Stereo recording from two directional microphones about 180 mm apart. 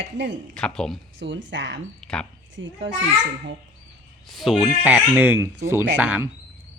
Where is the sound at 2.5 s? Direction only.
90° right.